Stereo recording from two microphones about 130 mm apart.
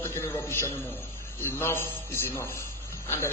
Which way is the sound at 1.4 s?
20° left (ahead or behind).